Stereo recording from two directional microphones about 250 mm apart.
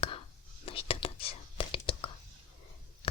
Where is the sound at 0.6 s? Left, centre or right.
Left.